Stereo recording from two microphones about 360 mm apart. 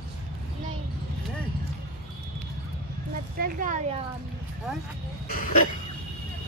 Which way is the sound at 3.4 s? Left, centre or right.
Right.